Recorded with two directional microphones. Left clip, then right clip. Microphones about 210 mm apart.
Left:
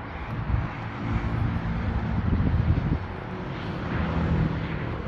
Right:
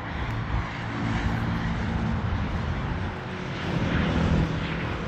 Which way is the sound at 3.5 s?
60° right (ahead or behind).